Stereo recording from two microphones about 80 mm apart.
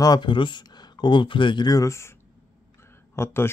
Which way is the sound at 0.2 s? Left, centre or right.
Left.